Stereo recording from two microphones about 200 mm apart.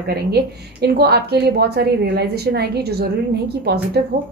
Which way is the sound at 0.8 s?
50° right (ahead or behind).